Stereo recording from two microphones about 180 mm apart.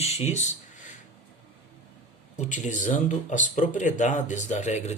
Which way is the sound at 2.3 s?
45° left (ahead or behind).